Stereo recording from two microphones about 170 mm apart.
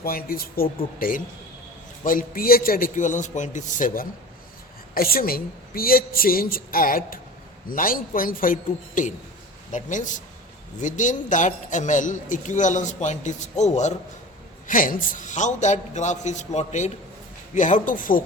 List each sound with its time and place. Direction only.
0.0 s a woman's voice: 60° left (ahead or behind); by 13.9 s 45° left (ahead or behind)
14.7 s a man's voice: 55° left (ahead or behind)